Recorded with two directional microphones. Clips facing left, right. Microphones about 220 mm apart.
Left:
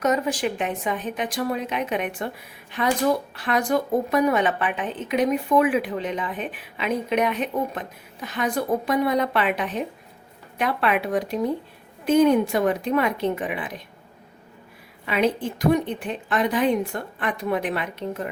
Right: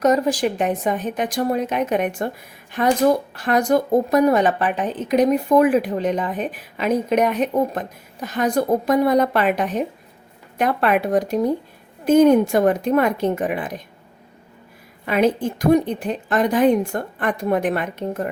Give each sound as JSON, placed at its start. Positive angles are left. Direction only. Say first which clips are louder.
{"t": 0.0, "sound": "speech", "louder": "right 5 dB", "side_deg": -35}
{"t": 15.0, "sound": "speech", "louder": "right 4 dB", "side_deg": -45}